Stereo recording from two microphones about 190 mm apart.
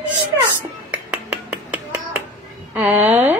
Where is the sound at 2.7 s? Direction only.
5° right (ahead or behind).